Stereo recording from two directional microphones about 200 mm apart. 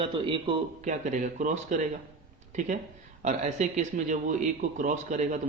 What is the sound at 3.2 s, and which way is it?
A man's voice, 35° right (ahead or behind).